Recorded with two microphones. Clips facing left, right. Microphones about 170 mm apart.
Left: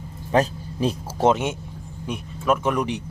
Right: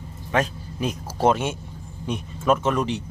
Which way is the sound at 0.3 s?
35° left (ahead or behind).